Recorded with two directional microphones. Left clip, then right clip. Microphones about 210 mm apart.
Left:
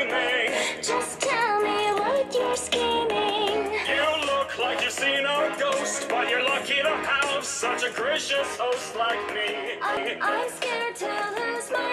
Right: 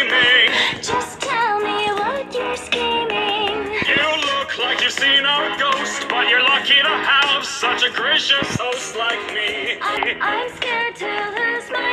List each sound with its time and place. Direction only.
0.0 s music: 30° right (ahead or behind)